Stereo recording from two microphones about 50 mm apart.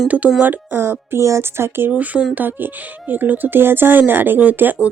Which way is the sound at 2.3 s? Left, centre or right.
Right.